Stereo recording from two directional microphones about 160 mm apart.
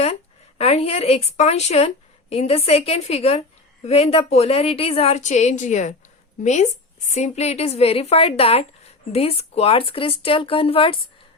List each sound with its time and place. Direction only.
0.6 s a woman's voice: 40° left (ahead or behind)